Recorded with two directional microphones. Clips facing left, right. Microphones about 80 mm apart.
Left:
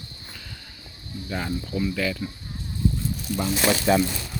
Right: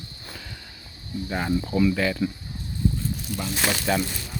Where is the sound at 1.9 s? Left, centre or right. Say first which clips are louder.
Right 2 dB; right.